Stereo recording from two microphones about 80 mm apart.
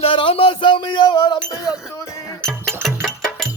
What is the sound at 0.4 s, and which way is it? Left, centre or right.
Music, left.